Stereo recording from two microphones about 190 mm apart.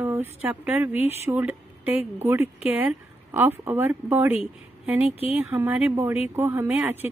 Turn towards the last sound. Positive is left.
turn(degrees=-10)  # may be behind; listen again after turning